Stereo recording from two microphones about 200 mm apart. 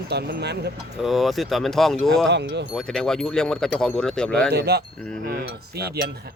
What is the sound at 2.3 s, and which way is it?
Wind chime, 60° right (ahead or behind).